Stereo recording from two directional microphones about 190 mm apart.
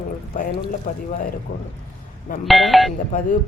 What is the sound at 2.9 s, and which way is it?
Speech, 45° left (ahead or behind).